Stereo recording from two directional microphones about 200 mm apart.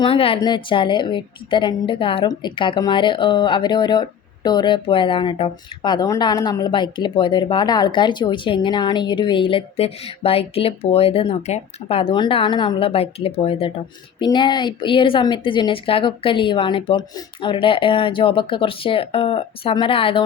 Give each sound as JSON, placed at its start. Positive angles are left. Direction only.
{"t": 0.0, "sound": "a woman's voice", "side_deg": 25}